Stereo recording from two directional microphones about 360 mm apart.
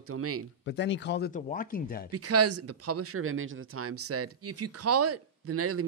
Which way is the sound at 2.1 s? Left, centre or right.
Right.